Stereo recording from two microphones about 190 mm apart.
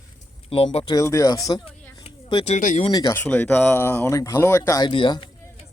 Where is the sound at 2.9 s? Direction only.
20° left (ahead or behind).